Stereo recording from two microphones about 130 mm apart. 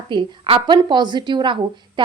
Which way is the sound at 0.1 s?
40° right (ahead or behind).